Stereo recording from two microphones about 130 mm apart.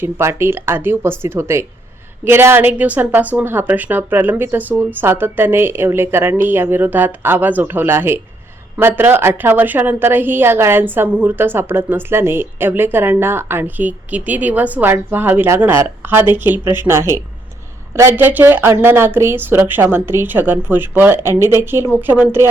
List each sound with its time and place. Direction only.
0.0 s a woman's voice: 20° right (ahead or behind)